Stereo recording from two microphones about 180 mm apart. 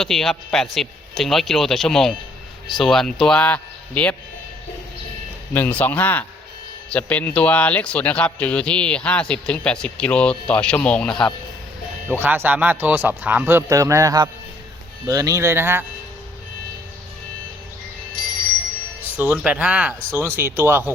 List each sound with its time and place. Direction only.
0.0 s speech: centre (ahead or behind)
5.5 s speech: 10° left (ahead or behind)
12.0 s speech: 10° right (ahead or behind)
19.1 s speech: 10° right (ahead or behind)